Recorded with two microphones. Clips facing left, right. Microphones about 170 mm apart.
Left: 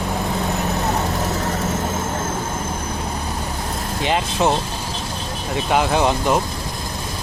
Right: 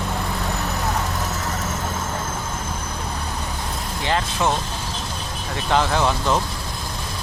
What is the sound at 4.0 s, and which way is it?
Speech, 20° left (ahead or behind).